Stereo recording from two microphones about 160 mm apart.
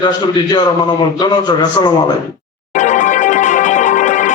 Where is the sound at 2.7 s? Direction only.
50° left (ahead or behind).